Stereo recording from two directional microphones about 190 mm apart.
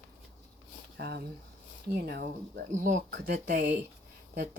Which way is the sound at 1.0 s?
60° right (ahead or behind).